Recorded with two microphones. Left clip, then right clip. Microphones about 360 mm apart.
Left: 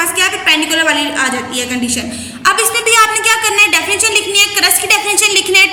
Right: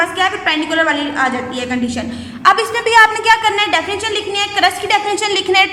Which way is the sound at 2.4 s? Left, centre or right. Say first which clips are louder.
Even; right.